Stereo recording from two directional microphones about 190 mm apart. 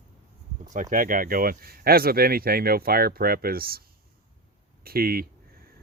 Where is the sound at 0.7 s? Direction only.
45° right (ahead or behind).